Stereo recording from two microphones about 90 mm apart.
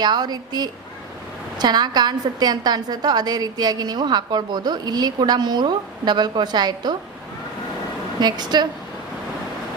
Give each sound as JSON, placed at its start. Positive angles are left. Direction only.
{"t": 0.0, "sound": "a woman's voice", "side_deg": -50}
{"t": 8.2, "sound": "a woman's voice", "side_deg": -50}